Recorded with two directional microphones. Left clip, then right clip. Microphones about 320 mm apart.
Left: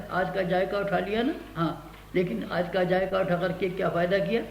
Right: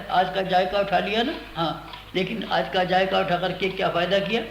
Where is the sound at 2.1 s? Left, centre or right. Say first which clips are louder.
Right 3 dB; centre.